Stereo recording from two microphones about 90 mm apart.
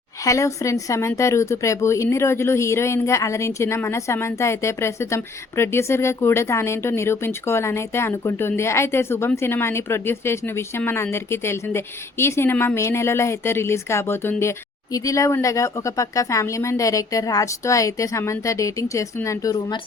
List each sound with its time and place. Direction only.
0.3 s a woman's voice: 35° left (ahead or behind)
14.9 s a woman's voice: 35° left (ahead or behind)